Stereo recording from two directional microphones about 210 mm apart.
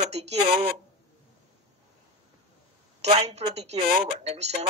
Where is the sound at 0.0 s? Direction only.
30° right (ahead or behind).